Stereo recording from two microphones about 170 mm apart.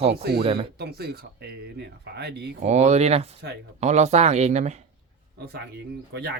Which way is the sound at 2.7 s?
40° right (ahead or behind).